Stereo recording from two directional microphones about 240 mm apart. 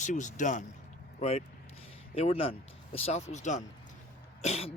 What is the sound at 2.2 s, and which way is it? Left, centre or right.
Speech, left.